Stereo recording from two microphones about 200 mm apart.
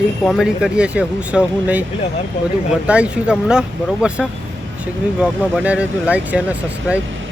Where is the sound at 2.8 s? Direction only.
5° right (ahead or behind).